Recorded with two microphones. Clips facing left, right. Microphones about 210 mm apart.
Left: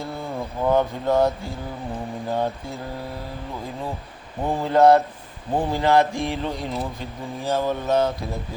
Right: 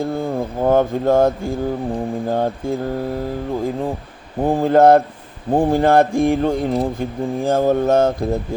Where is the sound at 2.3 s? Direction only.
50° right (ahead or behind).